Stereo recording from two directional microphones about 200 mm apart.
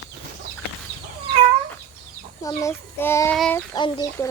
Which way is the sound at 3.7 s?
20° left (ahead or behind).